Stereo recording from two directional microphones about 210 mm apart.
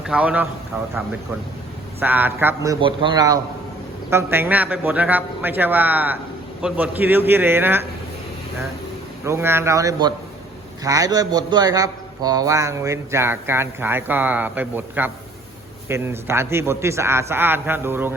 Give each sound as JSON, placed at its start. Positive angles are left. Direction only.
{"t": 0.0, "sound": "speech", "side_deg": -5}
{"t": 2.0, "sound": "a man's voice", "side_deg": -10}
{"t": 2.8, "sound": "a man's voice", "side_deg": -20}
{"t": 9.2, "sound": "a man's voice", "side_deg": -10}